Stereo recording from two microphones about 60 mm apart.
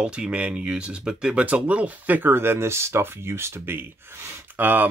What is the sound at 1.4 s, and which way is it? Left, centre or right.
Speech, right.